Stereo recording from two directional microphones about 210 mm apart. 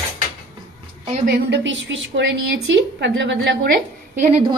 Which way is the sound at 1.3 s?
60° right (ahead or behind).